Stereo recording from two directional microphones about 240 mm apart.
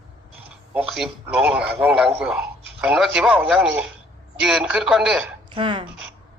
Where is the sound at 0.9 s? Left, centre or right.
Centre.